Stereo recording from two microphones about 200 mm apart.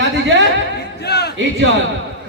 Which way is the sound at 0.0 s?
65° right (ahead or behind).